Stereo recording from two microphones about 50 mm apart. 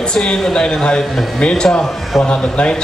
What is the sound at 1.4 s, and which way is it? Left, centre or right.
A man's voice, centre.